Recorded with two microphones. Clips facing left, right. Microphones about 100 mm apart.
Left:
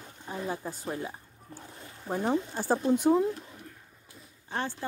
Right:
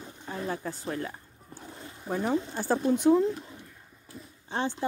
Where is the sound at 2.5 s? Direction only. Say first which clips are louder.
Even; 10° left (ahead or behind).